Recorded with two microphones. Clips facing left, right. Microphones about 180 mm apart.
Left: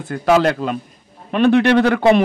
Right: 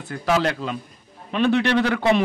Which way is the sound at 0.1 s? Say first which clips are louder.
Left 7 dB; 50° left (ahead or behind).